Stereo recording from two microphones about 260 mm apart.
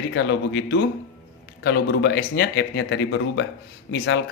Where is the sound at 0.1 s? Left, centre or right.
Left.